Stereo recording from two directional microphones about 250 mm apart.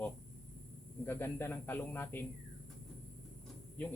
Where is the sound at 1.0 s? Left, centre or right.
Centre.